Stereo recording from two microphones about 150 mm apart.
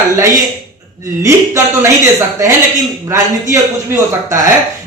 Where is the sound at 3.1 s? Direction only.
20° right (ahead or behind).